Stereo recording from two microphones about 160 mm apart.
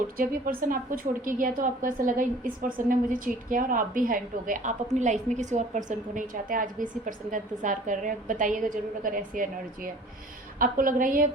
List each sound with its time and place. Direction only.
0.2 s a woman's voice: 60° right (ahead or behind)